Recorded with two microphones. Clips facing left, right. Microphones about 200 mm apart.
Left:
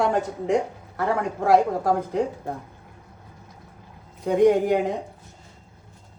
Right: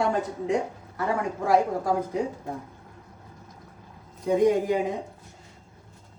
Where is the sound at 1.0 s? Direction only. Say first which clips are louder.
Left 3 dB; 65° left (ahead or behind).